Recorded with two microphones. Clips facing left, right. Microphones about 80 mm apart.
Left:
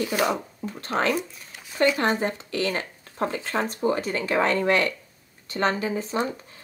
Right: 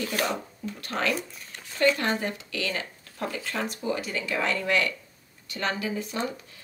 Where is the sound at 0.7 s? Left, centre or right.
Left.